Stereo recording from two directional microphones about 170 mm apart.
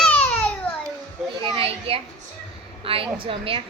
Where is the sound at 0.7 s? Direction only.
10° left (ahead or behind).